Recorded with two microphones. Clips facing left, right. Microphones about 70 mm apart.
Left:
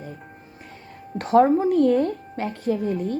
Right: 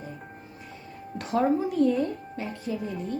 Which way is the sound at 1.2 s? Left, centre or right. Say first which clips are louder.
Left 8 dB; left.